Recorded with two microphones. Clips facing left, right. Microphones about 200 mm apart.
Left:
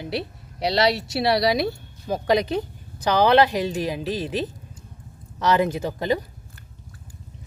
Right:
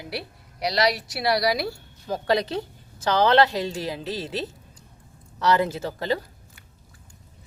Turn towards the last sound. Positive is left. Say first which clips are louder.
# left 3 dB
turn(degrees=15)  # may be behind; listen again after turning